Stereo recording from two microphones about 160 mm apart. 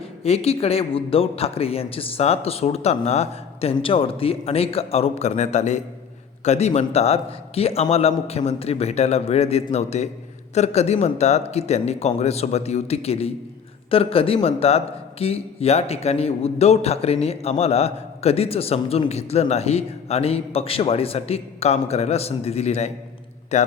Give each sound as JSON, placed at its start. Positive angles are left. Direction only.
{"t": 0.2, "sound": "a man's voice", "side_deg": 40}